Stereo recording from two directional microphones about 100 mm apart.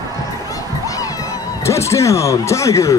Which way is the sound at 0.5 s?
35° left (ahead or behind).